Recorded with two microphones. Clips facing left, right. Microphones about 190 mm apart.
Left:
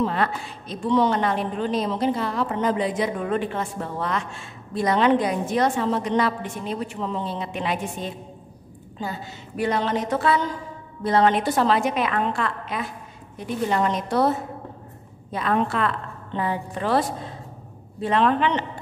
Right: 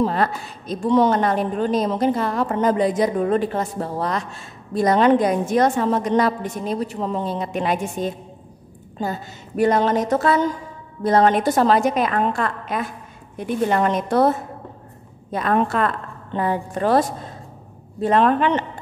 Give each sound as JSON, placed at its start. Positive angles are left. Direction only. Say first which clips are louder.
{"t": 0.0, "sound": "a woman's voice", "louder": "right 3 dB", "side_deg": -40}
{"t": 18.0, "sound": "a woman's voice", "louder": "right 3 dB", "side_deg": -45}